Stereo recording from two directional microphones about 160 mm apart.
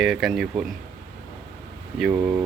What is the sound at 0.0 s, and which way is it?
Speech, centre (ahead or behind).